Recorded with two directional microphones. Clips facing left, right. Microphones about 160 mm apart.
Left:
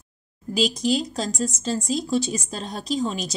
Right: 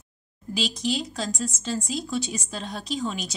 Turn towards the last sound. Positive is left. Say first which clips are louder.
# left 4 dB
turn(degrees=40)  # may be behind; listen again after turning